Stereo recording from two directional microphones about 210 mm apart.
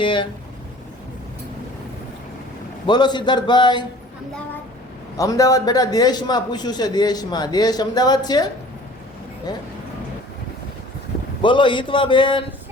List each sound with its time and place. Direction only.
0.0 s a sound: 25° left (ahead or behind)
2.8 s a man's voice: 20° left (ahead or behind)
5.1 s a man's voice: 15° left (ahead or behind)
9.5 s a man's voice: 20° left (ahead or behind)
11.4 s a man's voice: 25° left (ahead or behind)